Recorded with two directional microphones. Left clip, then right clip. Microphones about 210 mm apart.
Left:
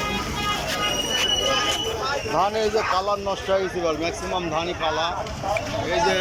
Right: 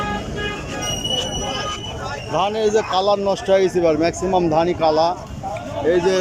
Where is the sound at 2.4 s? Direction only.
10° right (ahead or behind).